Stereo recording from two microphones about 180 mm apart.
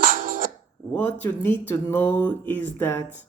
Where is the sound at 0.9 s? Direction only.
10° left (ahead or behind).